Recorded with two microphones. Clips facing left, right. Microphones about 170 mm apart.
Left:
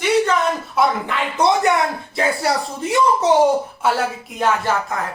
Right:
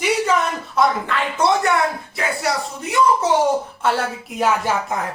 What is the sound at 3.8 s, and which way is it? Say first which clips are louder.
Speech: left 1 dB; centre (ahead or behind).